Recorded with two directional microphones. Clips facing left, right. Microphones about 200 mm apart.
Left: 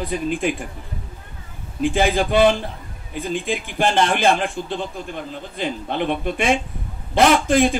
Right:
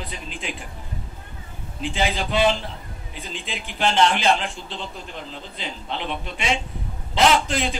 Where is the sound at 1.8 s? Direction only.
50° left (ahead or behind).